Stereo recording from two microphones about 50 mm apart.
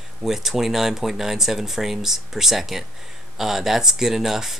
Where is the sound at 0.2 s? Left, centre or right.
Centre.